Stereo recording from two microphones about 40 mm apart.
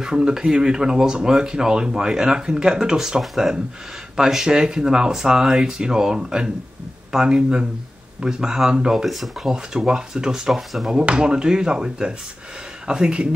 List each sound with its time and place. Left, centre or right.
0.0 s speech: centre
8.9 s speech: centre
9.5 s speech: centre
10.7 s speech: centre
11.0 s speech: right